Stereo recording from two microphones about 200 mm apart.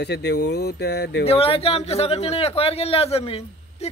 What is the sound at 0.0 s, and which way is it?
Speech, 55° left (ahead or behind).